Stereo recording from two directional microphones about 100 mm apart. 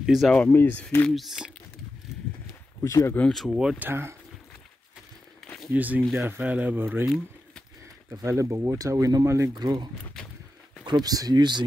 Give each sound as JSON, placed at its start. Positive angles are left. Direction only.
{"t": 0.0, "sound": "speech", "side_deg": -5}
{"t": 0.3, "sound": "speech", "side_deg": 15}
{"t": 1.1, "sound": "speech", "side_deg": 0}
{"t": 2.8, "sound": "speech", "side_deg": 30}
{"t": 3.2, "sound": "speech", "side_deg": 5}
{"t": 3.4, "sound": "speech", "side_deg": -5}
{"t": 3.8, "sound": "speech", "side_deg": -25}
{"t": 5.7, "sound": "speech", "side_deg": -15}
{"t": 8.1, "sound": "speech", "side_deg": -30}
{"t": 9.5, "sound": "speech", "side_deg": -45}